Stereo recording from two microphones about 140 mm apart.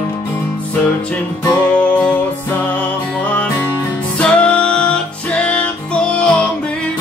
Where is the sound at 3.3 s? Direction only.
10° left (ahead or behind).